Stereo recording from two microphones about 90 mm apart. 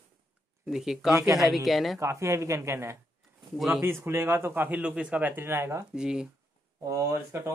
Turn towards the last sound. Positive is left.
turn(degrees=-30)  # may be behind; listen again after turning